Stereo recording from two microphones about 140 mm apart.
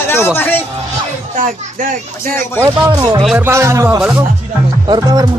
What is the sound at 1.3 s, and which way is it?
Speech, 70° right (ahead or behind).